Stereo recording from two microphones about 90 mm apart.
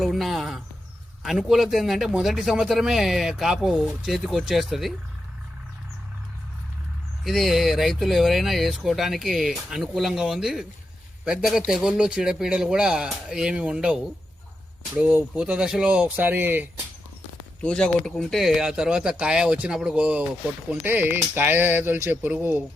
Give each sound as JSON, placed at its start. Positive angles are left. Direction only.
{"t": 0.0, "sound": "a man's voice", "side_deg": 0}
{"t": 7.3, "sound": "a man's voice", "side_deg": 0}
{"t": 17.6, "sound": "a man's voice", "side_deg": 10}
{"t": 20.8, "sound": "speech", "side_deg": -25}